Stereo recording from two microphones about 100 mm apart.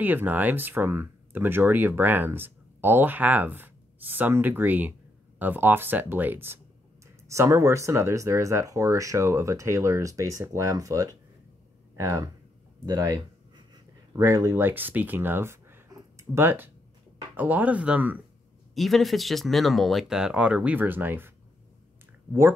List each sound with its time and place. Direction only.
0.0 s speech: 20° right (ahead or behind)
7.2 s speech: 30° right (ahead or behind); by 18.2 s 15° right (ahead or behind)
18.8 s speech: centre (ahead or behind); by 21.3 s 20° right (ahead or behind)